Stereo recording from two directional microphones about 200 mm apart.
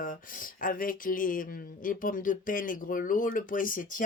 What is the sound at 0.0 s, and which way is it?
Speech, 45° left (ahead or behind).